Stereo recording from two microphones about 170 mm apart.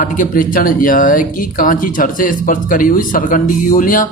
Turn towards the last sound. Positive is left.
turn(degrees=55)  # may be behind; listen again after turning